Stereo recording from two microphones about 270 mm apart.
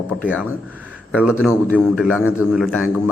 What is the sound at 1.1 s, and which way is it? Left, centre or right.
A man's voice, centre.